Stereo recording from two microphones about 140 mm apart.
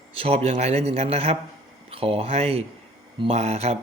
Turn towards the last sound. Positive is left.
turn(degrees=-45)  # may be behind; listen again after turning